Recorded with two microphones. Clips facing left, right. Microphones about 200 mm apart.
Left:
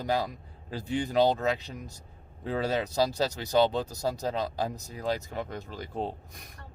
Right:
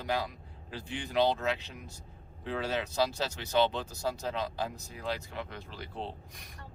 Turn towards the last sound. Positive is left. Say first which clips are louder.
# left 6 dB
turn(degrees=45)  # may be behind; listen again after turning